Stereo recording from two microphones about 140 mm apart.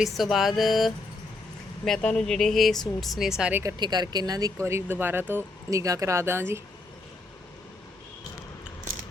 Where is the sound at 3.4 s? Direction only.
10° right (ahead or behind).